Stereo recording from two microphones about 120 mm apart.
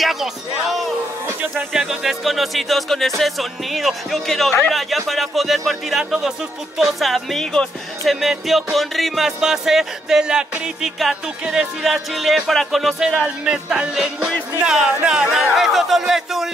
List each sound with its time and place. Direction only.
0.0 s speech: centre (ahead or behind)
1.5 s music: centre (ahead or behind)